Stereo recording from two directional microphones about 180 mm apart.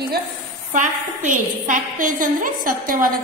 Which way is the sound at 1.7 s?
45° right (ahead or behind).